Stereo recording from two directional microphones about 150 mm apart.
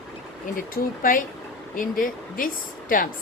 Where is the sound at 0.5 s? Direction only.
65° left (ahead or behind).